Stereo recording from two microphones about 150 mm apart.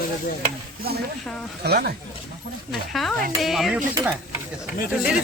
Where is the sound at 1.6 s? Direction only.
90° right.